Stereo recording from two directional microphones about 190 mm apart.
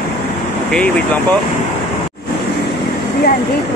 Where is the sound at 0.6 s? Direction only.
5° left (ahead or behind).